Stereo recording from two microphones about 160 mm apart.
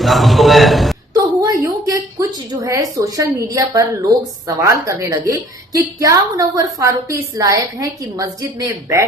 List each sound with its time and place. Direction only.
0.0 s a man's voice: centre (ahead or behind)
1.1 s a woman's voice: 20° right (ahead or behind)